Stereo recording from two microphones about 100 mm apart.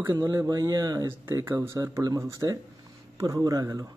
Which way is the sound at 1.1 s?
25° right (ahead or behind).